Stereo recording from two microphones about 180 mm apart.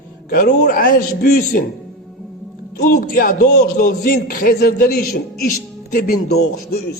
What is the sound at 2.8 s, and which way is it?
A man's voice, 50° left (ahead or behind).